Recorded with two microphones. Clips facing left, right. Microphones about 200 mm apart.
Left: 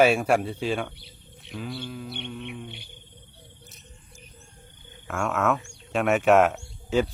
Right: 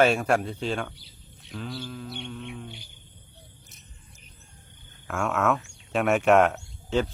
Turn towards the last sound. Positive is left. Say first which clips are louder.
# left 2 dB
turn(degrees=5)  # may be behind; listen again after turning